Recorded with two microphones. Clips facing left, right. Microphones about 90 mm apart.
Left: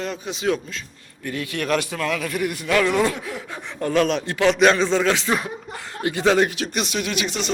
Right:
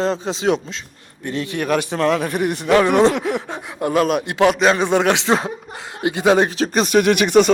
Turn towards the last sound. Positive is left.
turn(degrees=-55)  # may be behind; listen again after turning